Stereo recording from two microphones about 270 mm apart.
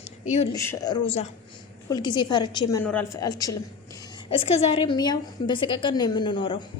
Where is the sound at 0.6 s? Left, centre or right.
Centre.